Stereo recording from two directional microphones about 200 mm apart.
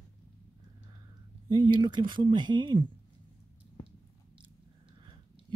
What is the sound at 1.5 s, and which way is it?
Speech, 20° right (ahead or behind).